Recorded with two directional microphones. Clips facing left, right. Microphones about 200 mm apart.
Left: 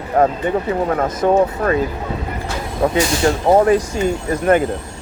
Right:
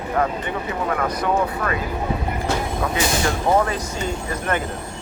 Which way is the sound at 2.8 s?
30° left (ahead or behind).